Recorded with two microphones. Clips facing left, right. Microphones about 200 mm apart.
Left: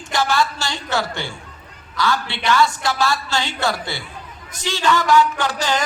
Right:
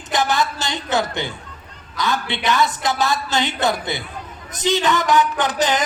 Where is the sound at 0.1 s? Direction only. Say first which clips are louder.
Even; 20° right (ahead or behind).